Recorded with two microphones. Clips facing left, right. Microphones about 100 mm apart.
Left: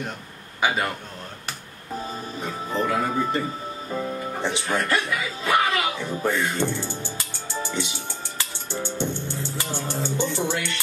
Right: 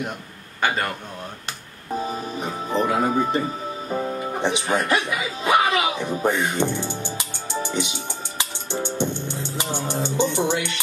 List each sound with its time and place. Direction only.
0.6 s a man's voice: 5° left (ahead or behind)
2.0 s speech: 20° right (ahead or behind)
8.4 s music: 20° right (ahead or behind)